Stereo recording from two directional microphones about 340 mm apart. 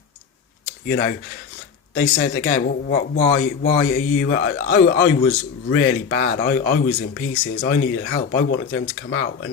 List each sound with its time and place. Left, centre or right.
0.9 s speech: left